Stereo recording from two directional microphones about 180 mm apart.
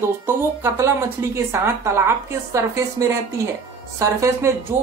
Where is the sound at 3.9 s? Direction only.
15° right (ahead or behind).